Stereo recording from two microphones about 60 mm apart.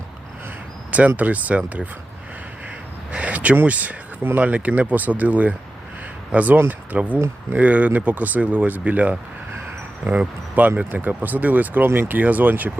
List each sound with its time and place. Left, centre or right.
0.9 s speech: right
3.1 s speech: right